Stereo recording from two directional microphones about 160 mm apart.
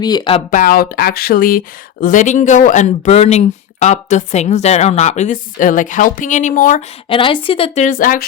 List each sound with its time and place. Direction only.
0.0 s speech: 25° left (ahead or behind)
0.5 s speech: 60° left (ahead or behind)
7.1 s speech: 35° left (ahead or behind)
7.9 s speech: 60° left (ahead or behind)